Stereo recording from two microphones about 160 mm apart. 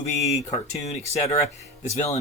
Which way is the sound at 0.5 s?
45° left (ahead or behind).